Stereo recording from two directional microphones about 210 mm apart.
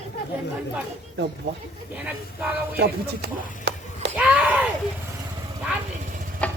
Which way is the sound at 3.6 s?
55° right (ahead or behind).